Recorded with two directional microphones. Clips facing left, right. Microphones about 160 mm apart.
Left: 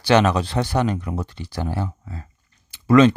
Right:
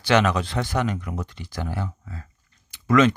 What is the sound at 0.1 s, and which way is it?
Speech, 35° left (ahead or behind).